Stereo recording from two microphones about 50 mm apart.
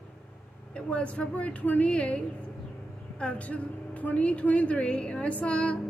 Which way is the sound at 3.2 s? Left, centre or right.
Left.